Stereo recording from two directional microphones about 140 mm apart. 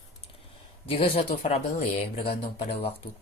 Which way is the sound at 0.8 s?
45° left (ahead or behind).